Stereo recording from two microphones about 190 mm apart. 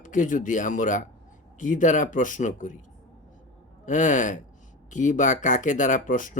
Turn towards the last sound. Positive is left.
turn(degrees=45)  # may be behind; listen again after turning